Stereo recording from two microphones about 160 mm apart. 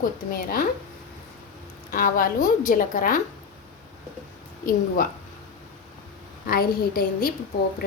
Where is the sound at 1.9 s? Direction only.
60° left (ahead or behind).